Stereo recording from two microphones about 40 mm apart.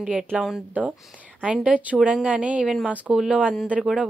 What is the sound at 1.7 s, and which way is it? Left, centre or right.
A woman's voice, right.